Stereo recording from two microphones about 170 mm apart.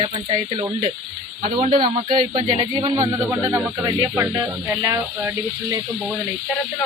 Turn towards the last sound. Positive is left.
turn(degrees=-20)  # may be behind; listen again after turning